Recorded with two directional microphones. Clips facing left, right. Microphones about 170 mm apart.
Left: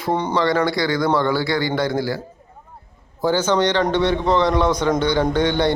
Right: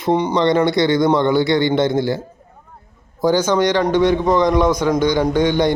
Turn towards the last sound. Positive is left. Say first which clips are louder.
# right 2 dB
turn(degrees=-10)  # may be behind; listen again after turning